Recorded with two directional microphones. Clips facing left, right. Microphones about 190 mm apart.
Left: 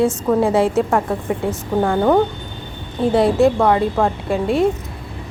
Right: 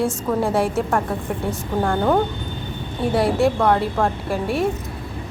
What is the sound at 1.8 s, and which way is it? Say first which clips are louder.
Speech: left 3 dB; 10° left (ahead or behind).